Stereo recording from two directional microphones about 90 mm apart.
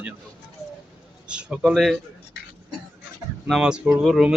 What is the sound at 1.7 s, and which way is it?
Speech, centre (ahead or behind).